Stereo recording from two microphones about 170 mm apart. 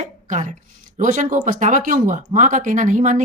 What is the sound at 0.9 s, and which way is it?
Speech, 50° right (ahead or behind).